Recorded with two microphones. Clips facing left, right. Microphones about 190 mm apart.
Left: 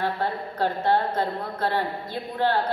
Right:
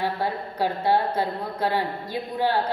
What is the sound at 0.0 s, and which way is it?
A woman's voice, 10° right (ahead or behind).